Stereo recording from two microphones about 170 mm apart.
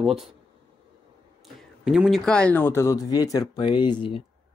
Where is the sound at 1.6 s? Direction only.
Centre (ahead or behind); by 4.2 s 30° left (ahead or behind).